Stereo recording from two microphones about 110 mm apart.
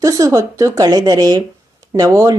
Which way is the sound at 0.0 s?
35° right (ahead or behind).